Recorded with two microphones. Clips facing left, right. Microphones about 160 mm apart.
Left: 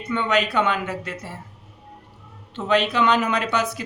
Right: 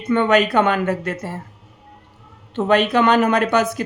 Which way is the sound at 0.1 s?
50° right (ahead or behind).